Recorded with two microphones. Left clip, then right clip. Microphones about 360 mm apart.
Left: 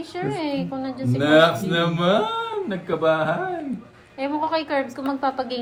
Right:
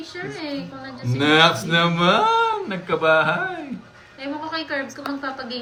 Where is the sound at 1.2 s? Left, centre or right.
Right.